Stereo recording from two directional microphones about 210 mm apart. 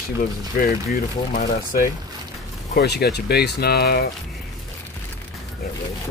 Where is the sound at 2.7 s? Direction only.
50° left (ahead or behind).